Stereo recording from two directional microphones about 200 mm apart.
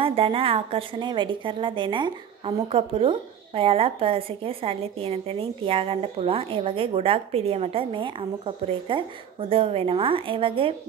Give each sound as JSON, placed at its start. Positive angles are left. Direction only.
{"t": 0.0, "sound": "a woman's voice", "side_deg": -30}